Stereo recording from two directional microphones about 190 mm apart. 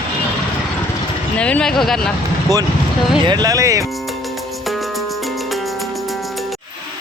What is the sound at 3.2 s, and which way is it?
Speech, 20° right (ahead or behind).